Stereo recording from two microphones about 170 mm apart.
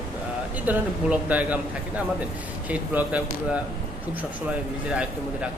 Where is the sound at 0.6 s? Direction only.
10° right (ahead or behind).